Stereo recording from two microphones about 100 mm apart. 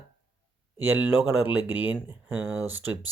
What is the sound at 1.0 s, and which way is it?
Speech, 15° right (ahead or behind).